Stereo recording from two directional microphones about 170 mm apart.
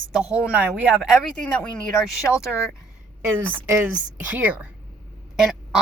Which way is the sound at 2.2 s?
5° left (ahead or behind).